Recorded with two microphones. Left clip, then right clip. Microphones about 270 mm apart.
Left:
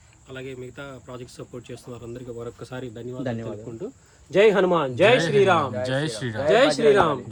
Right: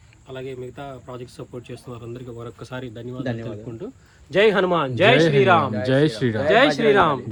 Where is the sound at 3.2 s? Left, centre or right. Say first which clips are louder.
Right 1 dB; left.